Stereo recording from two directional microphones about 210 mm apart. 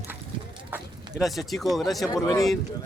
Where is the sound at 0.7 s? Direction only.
Centre (ahead or behind).